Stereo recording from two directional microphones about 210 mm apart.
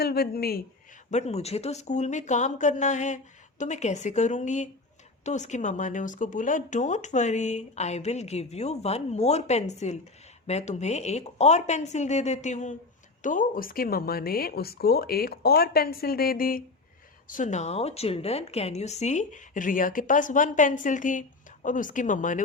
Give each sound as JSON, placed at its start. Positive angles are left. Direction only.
{"t": 0.0, "sound": "speech", "side_deg": 45}
{"t": 1.1, "sound": "speech", "side_deg": 30}